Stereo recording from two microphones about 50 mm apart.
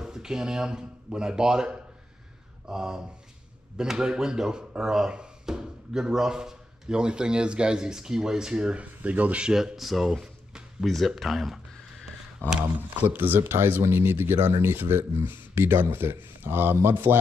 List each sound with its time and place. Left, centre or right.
0.0 s speech: centre
9.0 s speech: right
9.5 s speech: centre
10.2 s a sound: centre
10.9 s a sound: centre
12.4 s speech: left
12.9 s speech: right